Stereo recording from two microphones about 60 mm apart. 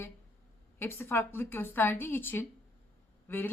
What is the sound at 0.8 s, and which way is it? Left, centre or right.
A woman's voice, left.